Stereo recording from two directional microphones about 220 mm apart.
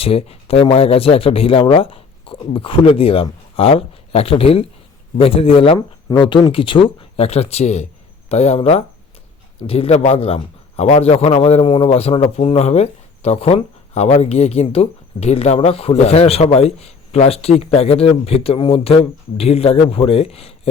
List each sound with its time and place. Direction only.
0.0 s a man's voice: 25° left (ahead or behind)